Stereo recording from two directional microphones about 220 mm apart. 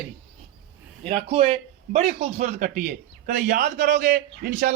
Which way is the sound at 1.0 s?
30° right (ahead or behind).